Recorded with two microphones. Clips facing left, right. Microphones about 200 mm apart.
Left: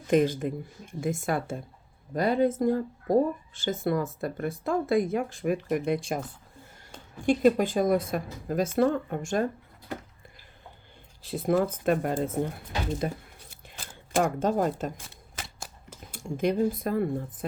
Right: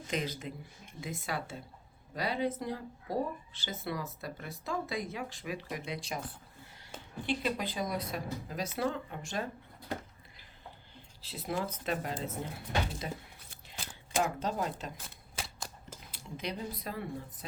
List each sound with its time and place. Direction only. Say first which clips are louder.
0.1 s speech: left 13 dB; 50° left (ahead or behind)
11.2 s speech: left 11 dB; 50° left (ahead or behind)
15.4 s scissors: left 1 dB; centre (ahead or behind)
16.1 s speech: left 13 dB; 50° left (ahead or behind)